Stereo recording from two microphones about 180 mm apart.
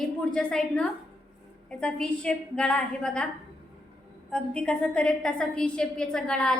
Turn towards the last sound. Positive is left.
turn(degrees=5)  # may be behind; listen again after turning